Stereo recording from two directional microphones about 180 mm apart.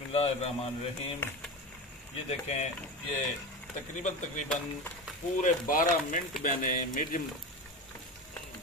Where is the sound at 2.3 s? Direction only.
40° left (ahead or behind).